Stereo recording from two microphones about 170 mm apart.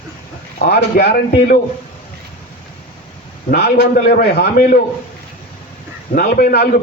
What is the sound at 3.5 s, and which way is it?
A man's voice, 70° left (ahead or behind).